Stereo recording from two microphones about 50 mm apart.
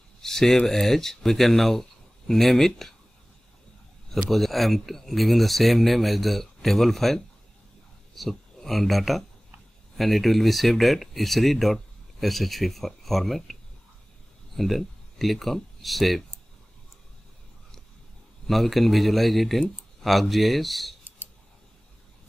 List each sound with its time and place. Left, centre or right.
0.2 s speech: centre
4.1 s speech: centre
14.6 s speech: centre
18.5 s speech: centre